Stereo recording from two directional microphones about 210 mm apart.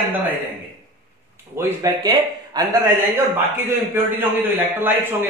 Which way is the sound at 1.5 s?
15° right (ahead or behind).